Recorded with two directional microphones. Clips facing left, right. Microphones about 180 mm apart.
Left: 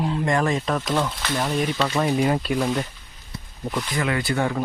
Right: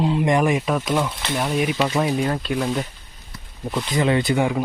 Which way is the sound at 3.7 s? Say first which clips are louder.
Right 4 dB; 15° right (ahead or behind).